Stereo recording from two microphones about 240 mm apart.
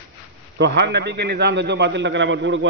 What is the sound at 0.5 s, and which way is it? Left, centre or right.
A man's voice, right.